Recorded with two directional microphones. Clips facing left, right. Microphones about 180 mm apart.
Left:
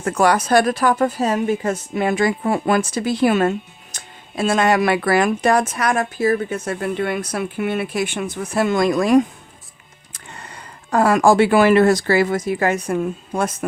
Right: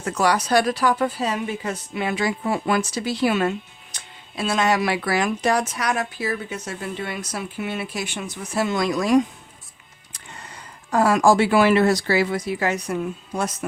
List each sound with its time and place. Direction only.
0.0 s a woman's voice: 55° left (ahead or behind)
10.3 s speech: 60° left (ahead or behind)